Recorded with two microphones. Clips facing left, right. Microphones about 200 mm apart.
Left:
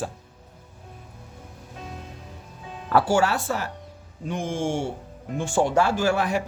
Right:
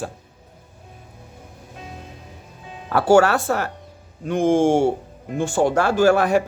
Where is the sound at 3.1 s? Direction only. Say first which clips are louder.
Right 7 dB; 70° right (ahead or behind).